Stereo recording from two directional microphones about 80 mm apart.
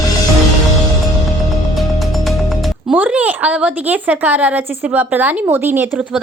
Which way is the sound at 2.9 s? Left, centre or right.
Centre.